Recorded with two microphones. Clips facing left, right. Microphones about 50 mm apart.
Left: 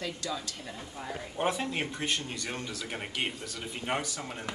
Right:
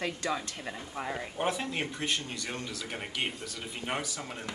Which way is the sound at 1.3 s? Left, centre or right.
Centre.